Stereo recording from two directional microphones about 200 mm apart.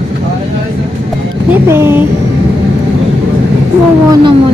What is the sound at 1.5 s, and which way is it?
Speech, 10° right (ahead or behind).